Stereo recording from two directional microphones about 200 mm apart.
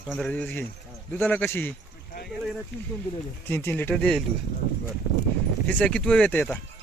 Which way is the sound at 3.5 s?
10° left (ahead or behind).